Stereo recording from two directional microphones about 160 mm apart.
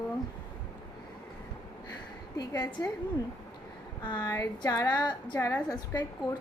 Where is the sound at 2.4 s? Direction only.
25° left (ahead or behind).